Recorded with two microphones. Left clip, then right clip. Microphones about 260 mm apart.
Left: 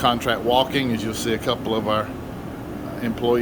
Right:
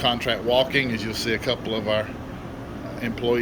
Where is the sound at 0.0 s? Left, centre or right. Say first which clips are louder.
Left 3 dB; centre.